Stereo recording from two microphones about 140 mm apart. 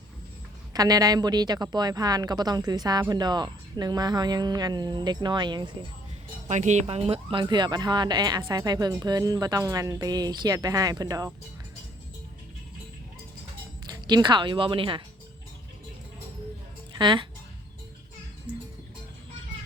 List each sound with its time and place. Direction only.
0.7 s a woman's voice: 25° right (ahead or behind)
6.5 s a woman's voice: 55° right (ahead or behind); by 11.3 s 25° right (ahead or behind)
13.9 s speech: 30° right (ahead or behind)
17.0 s speech: 35° right (ahead or behind)